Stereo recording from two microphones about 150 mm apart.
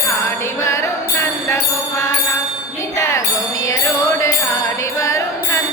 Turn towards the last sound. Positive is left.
turn(degrees=20)  # may be behind; listen again after turning